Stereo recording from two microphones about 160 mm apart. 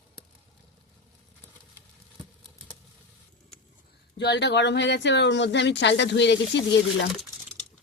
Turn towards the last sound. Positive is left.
turn(degrees=90)